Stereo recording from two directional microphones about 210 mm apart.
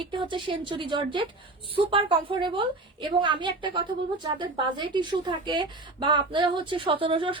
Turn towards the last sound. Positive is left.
turn(degrees=-25)  # may be behind; listen again after turning